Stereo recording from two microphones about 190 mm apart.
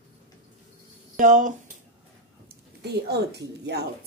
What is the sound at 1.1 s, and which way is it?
Speech, 45° right (ahead or behind).